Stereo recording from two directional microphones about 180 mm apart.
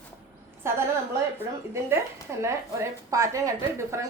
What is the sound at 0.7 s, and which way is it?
Speech, 15° right (ahead or behind).